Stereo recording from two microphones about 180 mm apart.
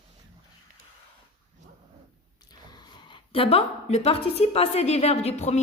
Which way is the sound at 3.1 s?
30° left (ahead or behind).